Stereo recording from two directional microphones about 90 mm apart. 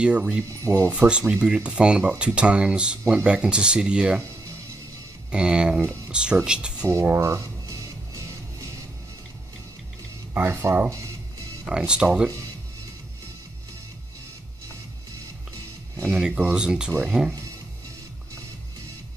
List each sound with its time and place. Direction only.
0.0 s speech: 10° right (ahead or behind)
5.3 s speech: 10° right (ahead or behind)
6.9 s speech: 30° right (ahead or behind)
10.3 s speech: 25° right (ahead or behind)
11.6 s speech: 10° right (ahead or behind)
16.1 s speech: 10° right (ahead or behind)